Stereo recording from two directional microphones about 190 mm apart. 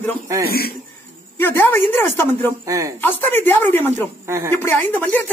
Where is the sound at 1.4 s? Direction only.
10° left (ahead or behind).